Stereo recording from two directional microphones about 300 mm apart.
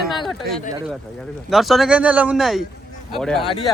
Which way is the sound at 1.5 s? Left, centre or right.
Centre.